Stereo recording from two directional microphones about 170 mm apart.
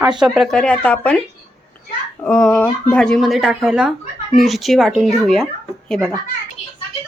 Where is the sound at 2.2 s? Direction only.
5° left (ahead or behind).